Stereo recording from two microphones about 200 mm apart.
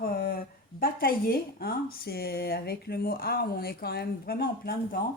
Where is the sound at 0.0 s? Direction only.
45° left (ahead or behind).